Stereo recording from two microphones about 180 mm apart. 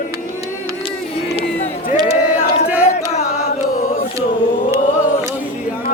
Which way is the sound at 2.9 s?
40° left (ahead or behind).